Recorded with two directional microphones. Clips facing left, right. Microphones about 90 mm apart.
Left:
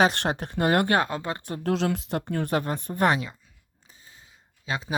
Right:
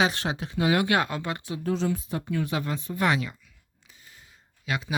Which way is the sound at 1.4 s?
50° left (ahead or behind).